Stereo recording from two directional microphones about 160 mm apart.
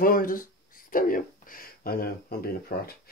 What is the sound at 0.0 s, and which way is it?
Speech, 60° left (ahead or behind).